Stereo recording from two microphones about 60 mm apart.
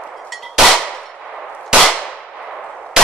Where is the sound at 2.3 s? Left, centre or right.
Centre.